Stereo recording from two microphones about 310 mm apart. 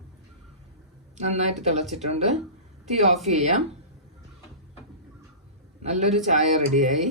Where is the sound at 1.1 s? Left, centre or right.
Right.